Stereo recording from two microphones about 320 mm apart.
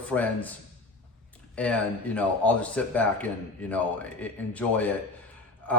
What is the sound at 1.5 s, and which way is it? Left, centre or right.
A man's voice, centre.